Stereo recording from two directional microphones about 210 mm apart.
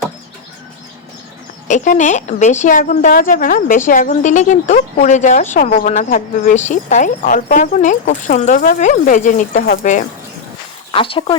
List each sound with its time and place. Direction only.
1.6 s speech: 35° left (ahead or behind)
10.9 s speech: 25° left (ahead or behind)